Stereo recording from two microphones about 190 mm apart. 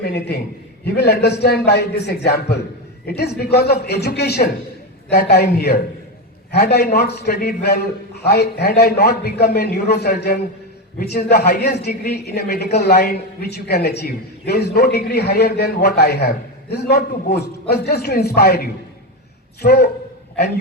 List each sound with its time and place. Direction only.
0.0 s a man's voice: 60° left (ahead or behind)